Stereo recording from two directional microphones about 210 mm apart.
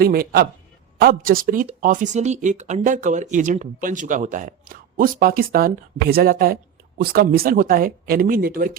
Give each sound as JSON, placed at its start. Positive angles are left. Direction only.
{"t": 0.0, "sound": "speech", "side_deg": -45}